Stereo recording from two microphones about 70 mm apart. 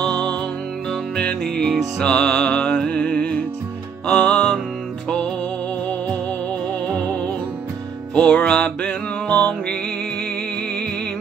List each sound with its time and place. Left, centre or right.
1.1 s music: centre
8.1 s music: centre